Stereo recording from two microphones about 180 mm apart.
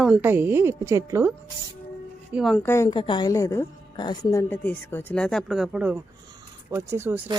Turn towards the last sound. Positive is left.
turn(degrees=-10)  # may be behind; listen again after turning